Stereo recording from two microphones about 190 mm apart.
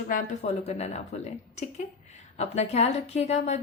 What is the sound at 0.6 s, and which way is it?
A woman's voice, 35° left (ahead or behind).